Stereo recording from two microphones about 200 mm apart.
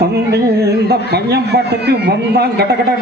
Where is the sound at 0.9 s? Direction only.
55° right (ahead or behind).